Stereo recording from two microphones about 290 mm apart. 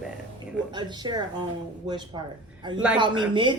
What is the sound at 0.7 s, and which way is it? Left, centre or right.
Speech, centre.